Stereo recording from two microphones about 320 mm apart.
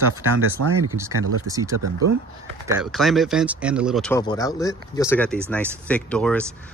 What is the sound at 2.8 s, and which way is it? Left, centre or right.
Speech, centre.